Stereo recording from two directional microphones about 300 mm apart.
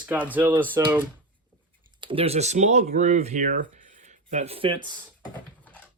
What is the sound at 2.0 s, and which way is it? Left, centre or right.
Speech, centre.